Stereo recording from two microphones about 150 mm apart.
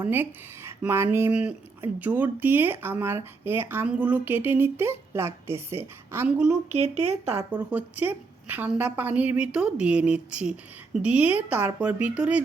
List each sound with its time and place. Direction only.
0.0 s speech: 15° right (ahead or behind)
6.8 s speech: 45° right (ahead or behind)
7.5 s speech: 10° right (ahead or behind)